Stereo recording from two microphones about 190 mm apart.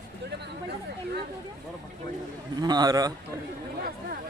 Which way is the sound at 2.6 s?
20° right (ahead or behind).